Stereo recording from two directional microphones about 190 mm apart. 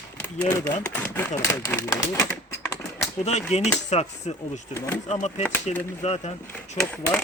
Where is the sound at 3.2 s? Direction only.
35° left (ahead or behind).